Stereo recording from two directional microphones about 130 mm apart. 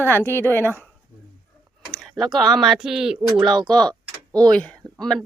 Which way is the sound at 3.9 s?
30° right (ahead or behind).